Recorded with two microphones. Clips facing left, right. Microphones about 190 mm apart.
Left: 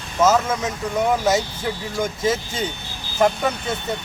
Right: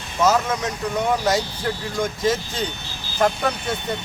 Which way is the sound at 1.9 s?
5° left (ahead or behind).